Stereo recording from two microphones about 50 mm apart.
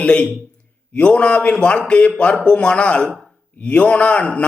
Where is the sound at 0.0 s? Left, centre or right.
Left.